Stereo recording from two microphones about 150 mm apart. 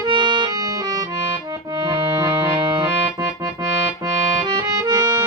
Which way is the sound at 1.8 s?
20° right (ahead or behind).